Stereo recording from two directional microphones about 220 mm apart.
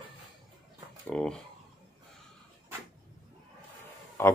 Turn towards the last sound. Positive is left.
turn(degrees=10)  # may be behind; listen again after turning